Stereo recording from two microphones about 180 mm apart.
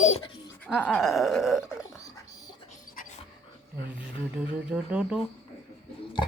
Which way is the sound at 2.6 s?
45° left (ahead or behind).